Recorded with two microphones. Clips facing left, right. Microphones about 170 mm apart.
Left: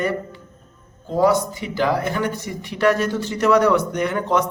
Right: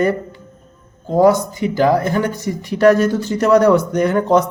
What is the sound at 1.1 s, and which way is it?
Speech, 45° right (ahead or behind).